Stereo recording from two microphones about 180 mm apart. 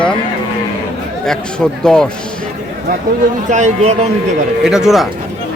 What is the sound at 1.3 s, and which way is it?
Speech, 5° left (ahead or behind).